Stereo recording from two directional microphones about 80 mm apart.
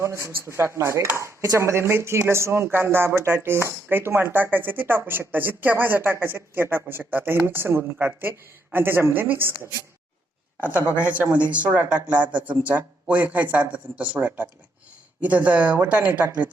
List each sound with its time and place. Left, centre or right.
0.0 s speech: right
1.1 s chopping: right
1.5 s speech: right
10.6 s speech: right